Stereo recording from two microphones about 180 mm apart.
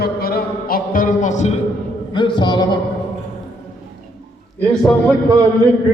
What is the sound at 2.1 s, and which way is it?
Speech, 25° left (ahead or behind).